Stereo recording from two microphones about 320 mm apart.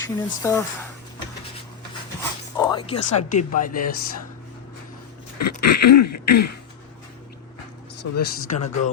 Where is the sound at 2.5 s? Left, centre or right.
Centre.